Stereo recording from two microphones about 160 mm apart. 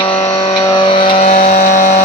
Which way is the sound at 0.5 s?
20° left (ahead or behind).